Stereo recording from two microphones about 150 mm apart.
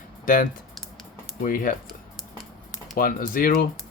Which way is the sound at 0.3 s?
65° left (ahead or behind).